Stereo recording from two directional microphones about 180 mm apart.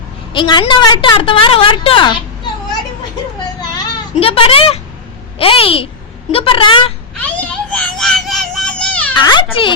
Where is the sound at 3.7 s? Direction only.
30° left (ahead or behind).